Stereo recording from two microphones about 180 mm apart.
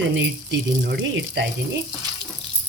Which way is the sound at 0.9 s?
75° right (ahead or behind).